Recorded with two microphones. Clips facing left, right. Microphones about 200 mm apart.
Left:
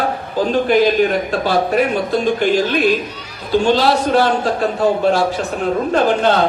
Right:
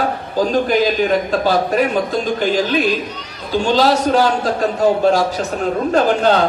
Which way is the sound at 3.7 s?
40° right (ahead or behind).